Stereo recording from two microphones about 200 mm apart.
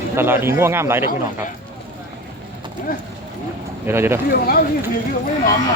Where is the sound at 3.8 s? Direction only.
10° right (ahead or behind).